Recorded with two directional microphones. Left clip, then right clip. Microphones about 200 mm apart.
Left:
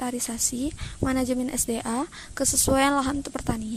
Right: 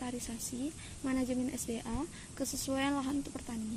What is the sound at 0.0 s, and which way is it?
A woman's voice, 40° left (ahead or behind).